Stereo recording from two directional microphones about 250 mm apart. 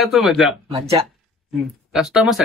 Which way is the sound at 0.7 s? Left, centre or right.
Centre.